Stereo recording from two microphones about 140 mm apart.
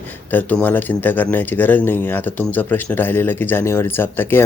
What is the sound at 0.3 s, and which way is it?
Speech, 10° left (ahead or behind).